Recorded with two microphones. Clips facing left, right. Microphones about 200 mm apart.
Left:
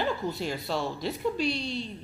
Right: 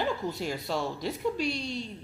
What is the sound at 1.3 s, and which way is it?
Speech, 45° right (ahead or behind).